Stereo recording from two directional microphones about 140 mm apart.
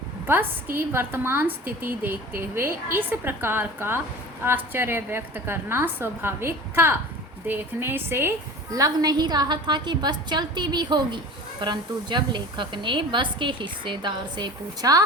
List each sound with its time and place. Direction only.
0.3 s a woman's voice: 15° right (ahead or behind)